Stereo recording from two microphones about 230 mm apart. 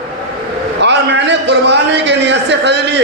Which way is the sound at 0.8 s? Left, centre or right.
Right.